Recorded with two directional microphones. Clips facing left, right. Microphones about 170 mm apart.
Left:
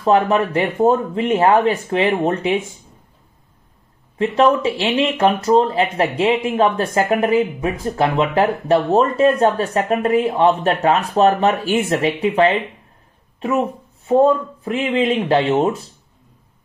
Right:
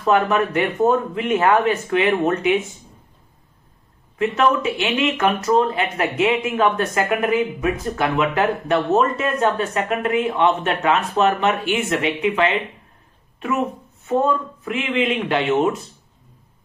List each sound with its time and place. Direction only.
0.0 s speech: 30° left (ahead or behind)
4.2 s speech: 30° left (ahead or behind)